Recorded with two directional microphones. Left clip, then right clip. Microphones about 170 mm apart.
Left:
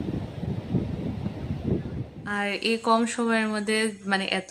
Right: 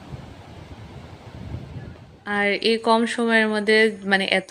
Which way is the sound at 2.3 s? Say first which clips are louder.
Right 6 dB; 25° right (ahead or behind).